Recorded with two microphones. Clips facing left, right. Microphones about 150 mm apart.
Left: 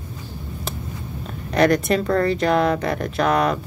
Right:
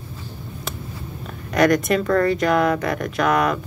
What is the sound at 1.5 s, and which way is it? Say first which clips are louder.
Speech: even; 30° left (ahead or behind).